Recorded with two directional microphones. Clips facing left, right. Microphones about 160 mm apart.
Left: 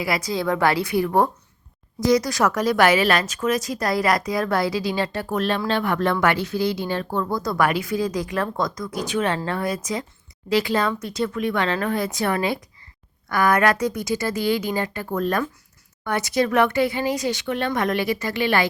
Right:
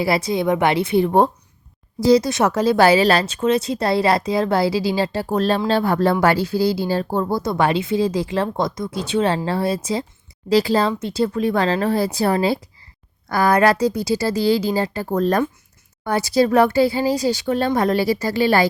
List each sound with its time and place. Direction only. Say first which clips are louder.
0.0 s speech: right 5 dB; 30° right (ahead or behind)